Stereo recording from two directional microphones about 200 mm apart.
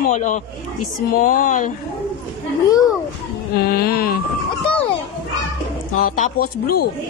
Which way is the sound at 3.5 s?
50° left (ahead or behind).